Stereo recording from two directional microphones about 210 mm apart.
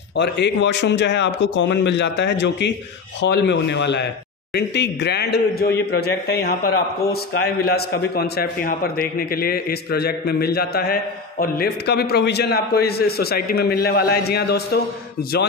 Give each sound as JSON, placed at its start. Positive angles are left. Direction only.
{"t": 0.1, "sound": "a man's voice", "side_deg": 55}